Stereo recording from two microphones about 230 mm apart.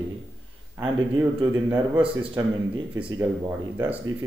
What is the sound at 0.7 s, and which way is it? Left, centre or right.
Speech, centre.